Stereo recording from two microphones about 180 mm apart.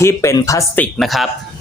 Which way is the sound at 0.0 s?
15° left (ahead or behind).